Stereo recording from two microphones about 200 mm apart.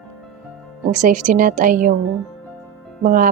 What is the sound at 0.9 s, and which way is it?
A woman's voice, 40° right (ahead or behind).